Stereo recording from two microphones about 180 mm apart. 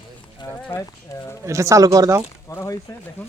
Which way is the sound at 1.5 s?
15° right (ahead or behind).